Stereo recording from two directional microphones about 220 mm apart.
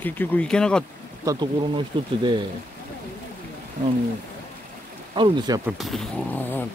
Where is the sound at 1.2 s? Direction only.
20° right (ahead or behind).